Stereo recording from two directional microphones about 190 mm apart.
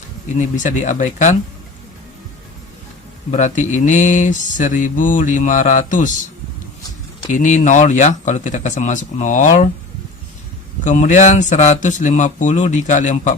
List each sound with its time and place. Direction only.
0.3 s speech: 40° left (ahead or behind)
3.3 s speech: 40° left (ahead or behind)
7.3 s speech: 40° left (ahead or behind)
10.8 s speech: 40° left (ahead or behind)